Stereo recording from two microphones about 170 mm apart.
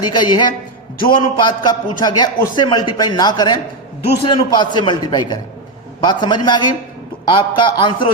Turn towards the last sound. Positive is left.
turn(degrees=30)  # may be behind; listen again after turning